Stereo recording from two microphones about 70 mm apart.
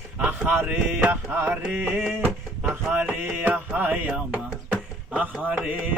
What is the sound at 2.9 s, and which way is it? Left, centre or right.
Music, right.